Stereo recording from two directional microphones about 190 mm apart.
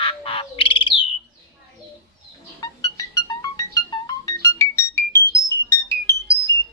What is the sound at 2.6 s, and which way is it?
Music, 20° left (ahead or behind).